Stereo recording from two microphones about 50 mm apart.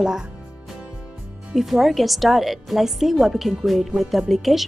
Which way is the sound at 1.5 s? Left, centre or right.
Centre.